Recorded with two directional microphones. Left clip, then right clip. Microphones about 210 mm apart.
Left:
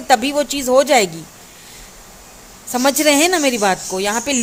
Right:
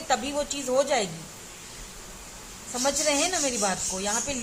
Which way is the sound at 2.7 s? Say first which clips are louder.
Left 11 dB; 50° left (ahead or behind).